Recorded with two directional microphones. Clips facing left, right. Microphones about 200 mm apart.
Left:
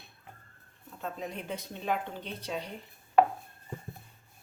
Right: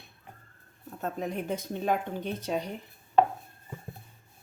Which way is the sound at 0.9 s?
45° right (ahead or behind).